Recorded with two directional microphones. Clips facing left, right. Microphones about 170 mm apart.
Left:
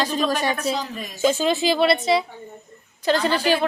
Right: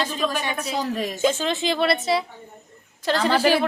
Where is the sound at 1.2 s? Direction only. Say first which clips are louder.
Left 4 dB; 10° left (ahead or behind).